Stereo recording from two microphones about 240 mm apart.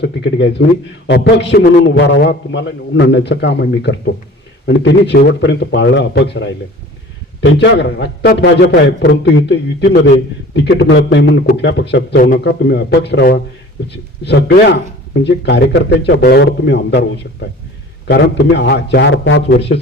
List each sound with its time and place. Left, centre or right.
0.0 s speech: left
10.5 s speech: left